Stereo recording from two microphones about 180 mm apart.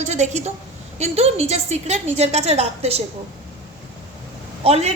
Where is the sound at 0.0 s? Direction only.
40° right (ahead or behind).